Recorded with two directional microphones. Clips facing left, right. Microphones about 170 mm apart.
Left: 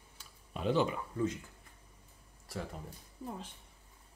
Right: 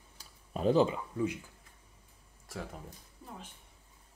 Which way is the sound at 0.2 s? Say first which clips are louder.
Right 5 dB; 40° right (ahead or behind).